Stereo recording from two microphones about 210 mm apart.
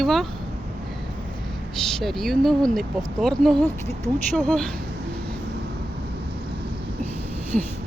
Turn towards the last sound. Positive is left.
turn(degrees=-35)  # may be behind; listen again after turning